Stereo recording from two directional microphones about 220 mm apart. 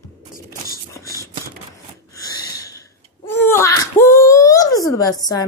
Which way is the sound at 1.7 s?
15° left (ahead or behind).